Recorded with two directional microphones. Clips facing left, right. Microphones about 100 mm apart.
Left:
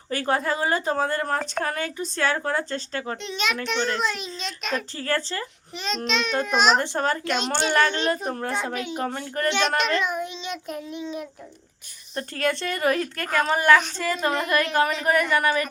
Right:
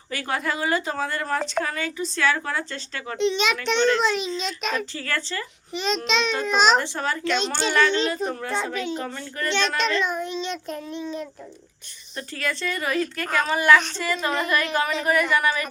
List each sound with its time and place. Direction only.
0.1 s speech: 40° left (ahead or behind)
3.2 s a child's voice: centre (ahead or behind)
4.9 s speech: 40° left (ahead or behind)
5.7 s a child's voice: centre (ahead or behind)
6.7 s speech: 45° left (ahead or behind)
7.3 s a child's voice: 5° left (ahead or behind)
7.7 s speech: 45° left (ahead or behind)
8.5 s child singing: 5° left (ahead or behind)
9.0 s speech: 50° left (ahead or behind)
9.5 s child singing: 15° left (ahead or behind)
12.1 s speech: 50° left (ahead or behind)